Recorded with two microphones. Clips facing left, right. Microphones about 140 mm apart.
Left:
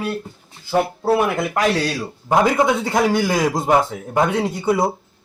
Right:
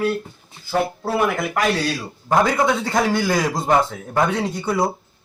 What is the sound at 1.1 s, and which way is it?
Speech, 25° left (ahead or behind).